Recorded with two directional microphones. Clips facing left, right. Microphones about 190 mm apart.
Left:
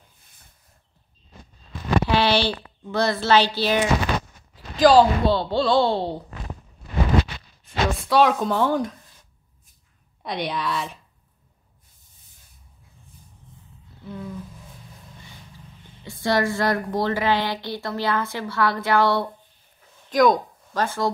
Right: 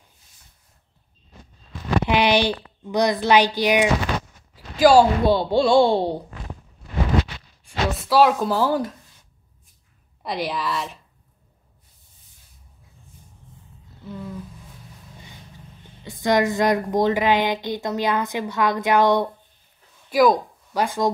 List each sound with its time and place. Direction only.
2.0 s a woman's voice: 15° right (ahead or behind)
7.6 s speech: 5° right (ahead or behind)
10.2 s speech: centre (ahead or behind)
14.0 s a sound: centre (ahead or behind)
16.1 s a woman's voice: 20° right (ahead or behind)
20.1 s speech: 5° right (ahead or behind)